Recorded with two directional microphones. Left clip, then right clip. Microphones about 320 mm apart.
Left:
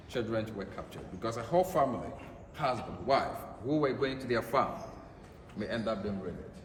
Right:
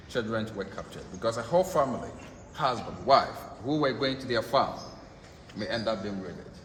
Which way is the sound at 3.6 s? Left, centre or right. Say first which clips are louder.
Right 3 dB; right.